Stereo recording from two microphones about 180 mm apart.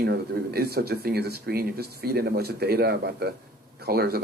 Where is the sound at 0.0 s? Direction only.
60° right (ahead or behind).